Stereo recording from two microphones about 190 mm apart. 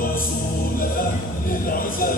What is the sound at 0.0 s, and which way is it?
Music, 50° left (ahead or behind).